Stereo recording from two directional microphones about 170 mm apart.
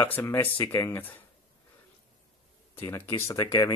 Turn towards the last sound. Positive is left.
turn(degrees=25)  # may be behind; listen again after turning